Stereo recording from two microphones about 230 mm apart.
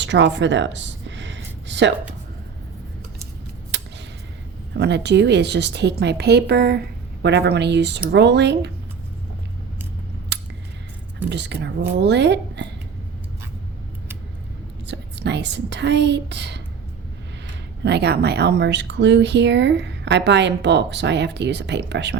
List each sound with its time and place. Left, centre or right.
0.0 s a sound: right
4.8 s speech: right
10.3 s scissors: right
11.3 s speech: right
14.8 s speech: right
17.8 s speech: right